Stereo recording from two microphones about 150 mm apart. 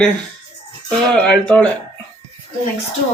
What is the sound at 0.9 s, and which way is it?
Speech, 5° left (ahead or behind).